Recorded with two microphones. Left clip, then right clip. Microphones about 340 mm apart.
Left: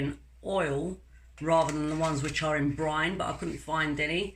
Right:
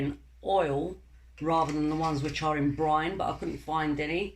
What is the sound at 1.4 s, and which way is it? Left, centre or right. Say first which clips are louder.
Speech: left 1 dB; centre.